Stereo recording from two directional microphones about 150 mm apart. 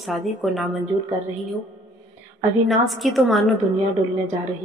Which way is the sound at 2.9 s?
Centre (ahead or behind).